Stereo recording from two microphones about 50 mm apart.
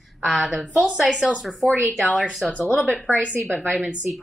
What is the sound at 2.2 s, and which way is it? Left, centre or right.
Speech, centre.